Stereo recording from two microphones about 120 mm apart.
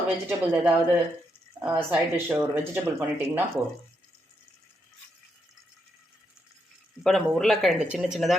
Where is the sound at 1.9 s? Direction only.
15° right (ahead or behind).